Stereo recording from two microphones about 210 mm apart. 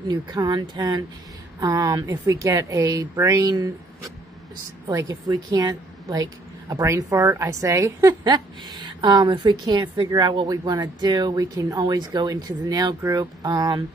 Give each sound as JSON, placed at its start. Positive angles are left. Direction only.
{"t": 0.1, "sound": "a woman's voice", "side_deg": -20}